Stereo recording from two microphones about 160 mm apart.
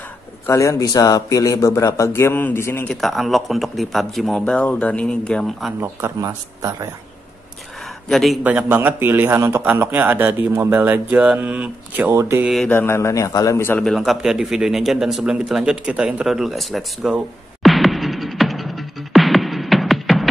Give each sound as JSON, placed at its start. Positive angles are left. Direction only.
{"t": 0.5, "sound": "speech", "side_deg": 20}
{"t": 3.0, "sound": "a man's voice", "side_deg": 0}
{"t": 5.8, "sound": "a man's voice", "side_deg": -15}
{"t": 8.1, "sound": "a man's voice", "side_deg": 0}
{"t": 8.5, "sound": "a man's voice", "side_deg": -10}
{"t": 12.6, "sound": "a man's voice", "side_deg": 15}
{"t": 13.8, "sound": "a man's voice", "side_deg": 0}
{"t": 17.6, "sound": "music", "side_deg": 0}